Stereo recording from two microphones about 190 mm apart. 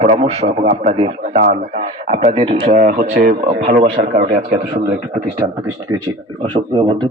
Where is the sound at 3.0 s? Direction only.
50° right (ahead or behind).